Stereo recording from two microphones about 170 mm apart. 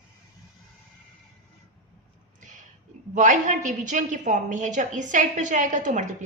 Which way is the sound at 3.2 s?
45° right (ahead or behind).